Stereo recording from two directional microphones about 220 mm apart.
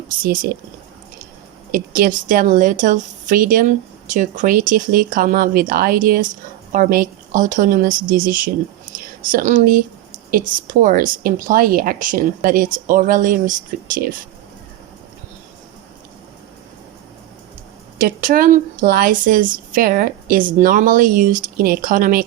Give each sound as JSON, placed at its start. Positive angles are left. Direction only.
{"t": 0.2, "sound": "speech", "side_deg": -40}
{"t": 1.7, "sound": "speech", "side_deg": -40}
{"t": 17.9, "sound": "speech", "side_deg": -40}